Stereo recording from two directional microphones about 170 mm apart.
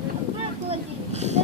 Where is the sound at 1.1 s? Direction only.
40° right (ahead or behind).